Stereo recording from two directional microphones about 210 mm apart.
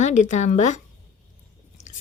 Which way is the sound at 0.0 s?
35° left (ahead or behind).